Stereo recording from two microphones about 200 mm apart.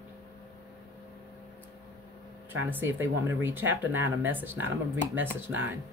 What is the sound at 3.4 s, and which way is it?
Speech, 10° right (ahead or behind).